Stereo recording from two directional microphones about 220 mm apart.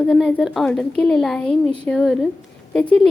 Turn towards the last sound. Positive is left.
turn(degrees=5)  # may be behind; listen again after turning